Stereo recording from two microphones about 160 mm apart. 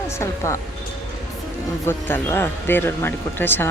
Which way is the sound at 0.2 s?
20° left (ahead or behind).